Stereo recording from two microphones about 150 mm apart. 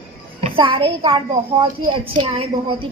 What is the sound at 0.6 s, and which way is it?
A woman's voice, 35° right (ahead or behind).